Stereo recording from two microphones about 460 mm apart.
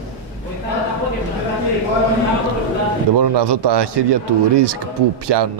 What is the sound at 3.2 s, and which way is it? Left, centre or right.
Speech, right.